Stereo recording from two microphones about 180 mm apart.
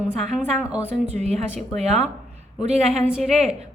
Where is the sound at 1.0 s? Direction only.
35° right (ahead or behind).